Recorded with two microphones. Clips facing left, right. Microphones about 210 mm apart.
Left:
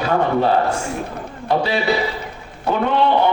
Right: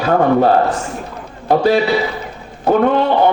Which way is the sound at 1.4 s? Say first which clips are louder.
Right 7 dB; 45° right (ahead or behind).